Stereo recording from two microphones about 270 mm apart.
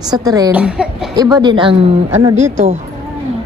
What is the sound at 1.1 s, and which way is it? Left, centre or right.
A woman's voice, centre.